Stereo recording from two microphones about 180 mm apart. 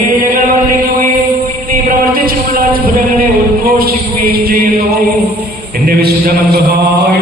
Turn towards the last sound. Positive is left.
turn(degrees=-60)  # may be behind; listen again after turning